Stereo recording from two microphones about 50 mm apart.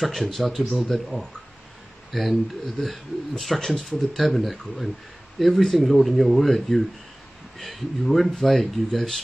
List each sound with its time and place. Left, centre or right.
0.0 s speech: centre